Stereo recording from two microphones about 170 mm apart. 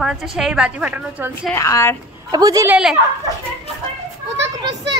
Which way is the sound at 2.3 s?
20° right (ahead or behind).